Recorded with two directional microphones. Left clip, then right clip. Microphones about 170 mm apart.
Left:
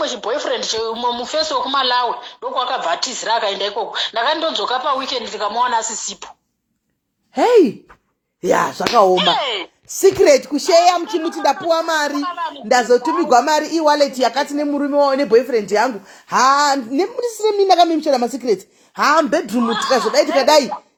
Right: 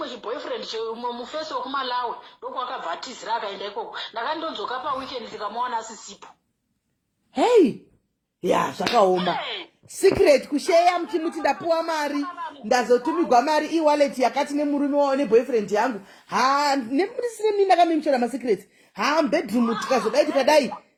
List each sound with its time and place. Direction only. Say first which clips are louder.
0.0 s speech: left 10 dB; 35° left (ahead or behind)
7.3 s speech: left 5 dB; 35° left (ahead or behind)